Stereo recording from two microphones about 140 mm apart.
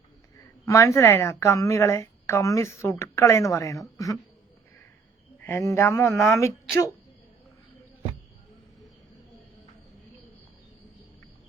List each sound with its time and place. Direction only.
0.6 s a woman's voice: 20° left (ahead or behind)
5.5 s a woman's voice: 20° left (ahead or behind)